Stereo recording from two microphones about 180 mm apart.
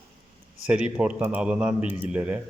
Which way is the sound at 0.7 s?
5° right (ahead or behind).